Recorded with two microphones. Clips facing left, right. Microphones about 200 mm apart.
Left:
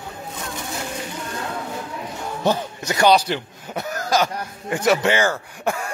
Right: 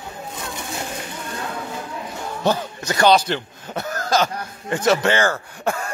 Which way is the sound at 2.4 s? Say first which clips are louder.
Even; 15° left (ahead or behind).